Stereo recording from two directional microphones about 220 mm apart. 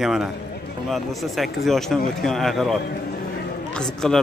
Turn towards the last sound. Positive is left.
turn(degrees=0)  # may be behind; listen again after turning